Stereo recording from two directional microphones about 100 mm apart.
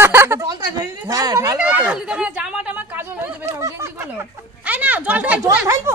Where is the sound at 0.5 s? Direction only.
40° right (ahead or behind).